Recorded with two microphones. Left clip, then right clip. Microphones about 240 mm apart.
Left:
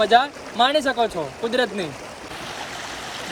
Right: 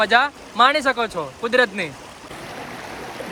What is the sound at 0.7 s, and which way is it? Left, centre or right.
Speech, centre.